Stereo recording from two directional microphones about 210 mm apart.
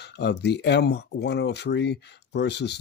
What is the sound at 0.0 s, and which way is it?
Speech, 50° left (ahead or behind).